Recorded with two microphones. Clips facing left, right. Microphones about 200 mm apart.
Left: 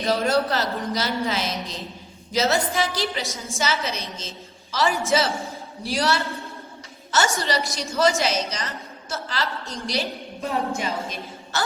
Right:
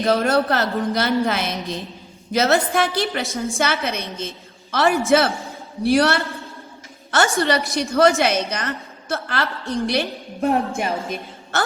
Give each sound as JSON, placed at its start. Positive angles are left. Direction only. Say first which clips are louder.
{"t": 0.0, "sound": "a woman's voice", "louder": "right 3 dB", "side_deg": -55}